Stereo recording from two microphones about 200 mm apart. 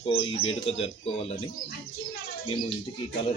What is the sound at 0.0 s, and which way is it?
Speech, 25° left (ahead or behind).